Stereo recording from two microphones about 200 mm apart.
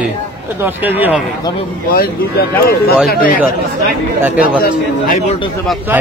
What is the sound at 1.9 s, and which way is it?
Speech, 50° left (ahead or behind).